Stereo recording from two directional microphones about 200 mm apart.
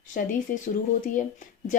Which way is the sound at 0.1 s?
40° left (ahead or behind).